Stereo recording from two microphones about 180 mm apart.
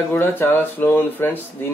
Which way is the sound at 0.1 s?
10° left (ahead or behind).